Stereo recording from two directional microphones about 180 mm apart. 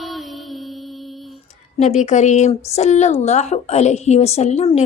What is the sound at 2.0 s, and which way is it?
A woman's voice, 40° left (ahead or behind).